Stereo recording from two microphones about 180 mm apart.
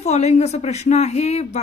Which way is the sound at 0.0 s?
40° left (ahead or behind).